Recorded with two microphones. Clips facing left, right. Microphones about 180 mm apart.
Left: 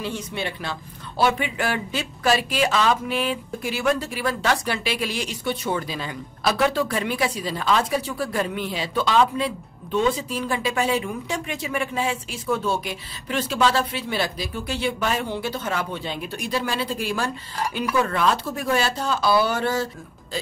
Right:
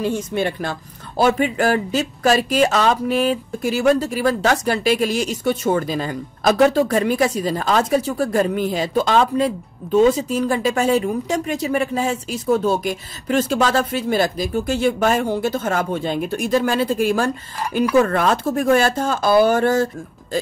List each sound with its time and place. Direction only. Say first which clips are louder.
0.0 s speech: right 8 dB; 45° right (ahead or behind)